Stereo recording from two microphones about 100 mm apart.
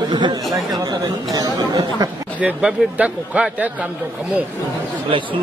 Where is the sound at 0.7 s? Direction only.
40° right (ahead or behind).